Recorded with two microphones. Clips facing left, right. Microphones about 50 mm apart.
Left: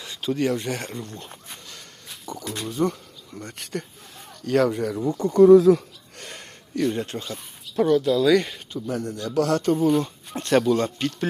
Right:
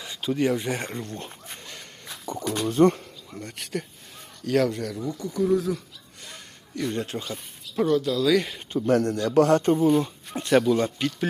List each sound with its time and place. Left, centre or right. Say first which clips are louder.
0.0 s speech: even; centre
0.8 s speech: right 1 dB; right
2.2 s speech: right 4 dB; right
2.6 s speech: right 6 dB; right
3.3 s speech: even; centre
4.9 s speech: left 7 dB; left
5.3 s speech: left 12 dB; left
6.8 s speech: left 2 dB; centre
8.9 s a man's voice: right 7 dB; right
9.4 s speech: right 2 dB; right
10.4 s speech: even; centre